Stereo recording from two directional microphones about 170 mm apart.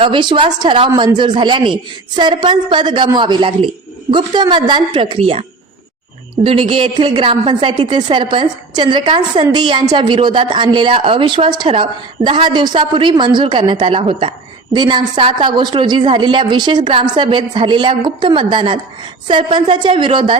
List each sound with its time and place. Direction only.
0.0 s a woman's voice: 30° right (ahead or behind)